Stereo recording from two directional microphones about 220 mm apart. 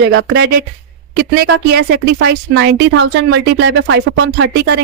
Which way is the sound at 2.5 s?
60° right (ahead or behind).